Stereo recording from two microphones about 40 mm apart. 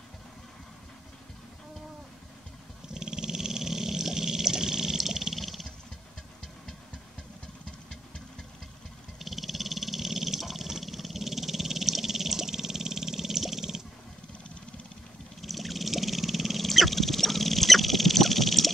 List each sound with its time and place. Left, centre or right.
2.9 s dog: centre
9.2 s a sound: centre
15.4 s wild animals: centre